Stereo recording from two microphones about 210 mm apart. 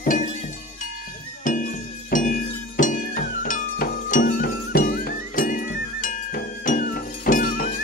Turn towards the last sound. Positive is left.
turn(degrees=40)  # may be behind; listen again after turning